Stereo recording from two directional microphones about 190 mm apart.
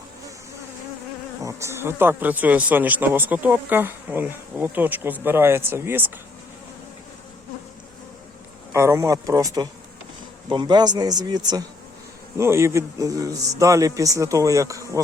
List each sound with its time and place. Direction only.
1.4 s speech: 15° right (ahead or behind)
8.7 s speech: 15° right (ahead or behind)